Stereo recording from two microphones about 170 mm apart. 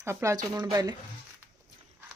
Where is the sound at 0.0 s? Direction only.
15° right (ahead or behind).